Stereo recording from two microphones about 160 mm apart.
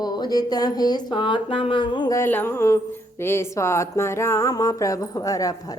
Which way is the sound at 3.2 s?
15° left (ahead or behind).